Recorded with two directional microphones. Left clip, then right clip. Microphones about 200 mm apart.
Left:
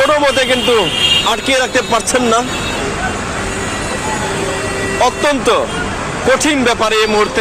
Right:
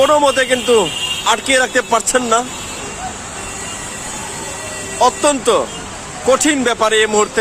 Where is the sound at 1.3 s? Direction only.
20° right (ahead or behind).